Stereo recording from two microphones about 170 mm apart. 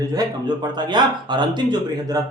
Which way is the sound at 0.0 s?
20° right (ahead or behind).